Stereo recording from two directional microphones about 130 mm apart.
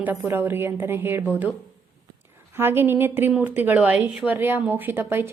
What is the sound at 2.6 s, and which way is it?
A woman's voice, 15° right (ahead or behind).